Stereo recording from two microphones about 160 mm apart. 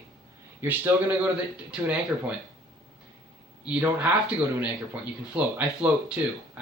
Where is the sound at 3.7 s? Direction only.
10° right (ahead or behind).